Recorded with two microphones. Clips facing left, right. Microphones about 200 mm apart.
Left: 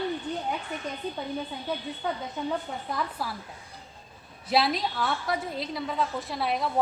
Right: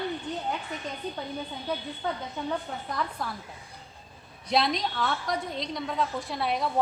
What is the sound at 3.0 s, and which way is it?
Speech, 5° left (ahead or behind).